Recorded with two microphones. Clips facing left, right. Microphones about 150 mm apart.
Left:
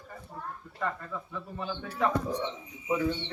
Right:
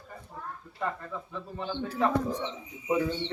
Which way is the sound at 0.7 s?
15° right (ahead or behind).